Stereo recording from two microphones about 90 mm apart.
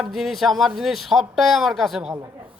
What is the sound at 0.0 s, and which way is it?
A man's voice, centre (ahead or behind).